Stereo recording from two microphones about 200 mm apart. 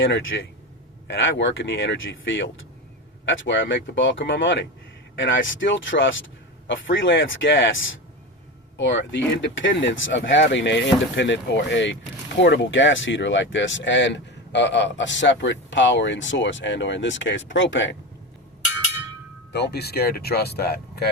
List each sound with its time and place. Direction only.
0.0 s speech: 70° left (ahead or behind)
8.8 s speech: 65° left (ahead or behind)
19.5 s speech: 55° left (ahead or behind)